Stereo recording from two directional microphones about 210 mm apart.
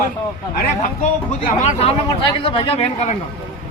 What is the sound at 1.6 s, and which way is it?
Speech, 30° left (ahead or behind).